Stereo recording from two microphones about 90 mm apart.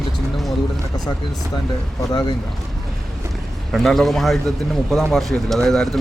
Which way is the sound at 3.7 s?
Centre (ahead or behind).